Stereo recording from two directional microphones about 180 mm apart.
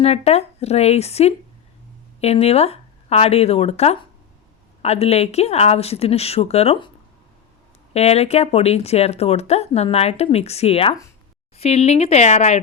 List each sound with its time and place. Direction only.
0.0 s speech: 35° left (ahead or behind)
7.9 s speech: 35° left (ahead or behind)